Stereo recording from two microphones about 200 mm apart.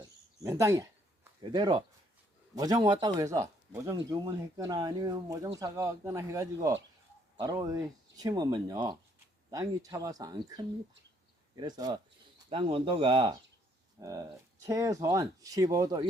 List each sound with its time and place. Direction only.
0.4 s speech: 15° right (ahead or behind)